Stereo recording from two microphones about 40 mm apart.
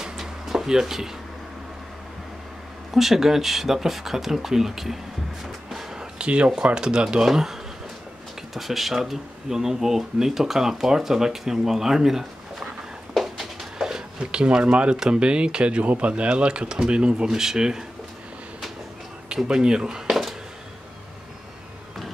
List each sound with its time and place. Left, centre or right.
0.0 s a sound: centre
2.9 s speech: centre
5.9 s speech: right
7.2 s speech: centre
8.5 s speech: centre
13.1 s a sound: centre; by 15.0 s right
15.0 s speech: right
15.8 s speech: right
17.4 s speech: centre
19.4 s speech: centre
20.1 s a sound: centre